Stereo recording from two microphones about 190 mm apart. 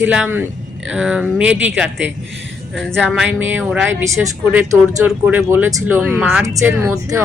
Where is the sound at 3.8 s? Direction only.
15° right (ahead or behind).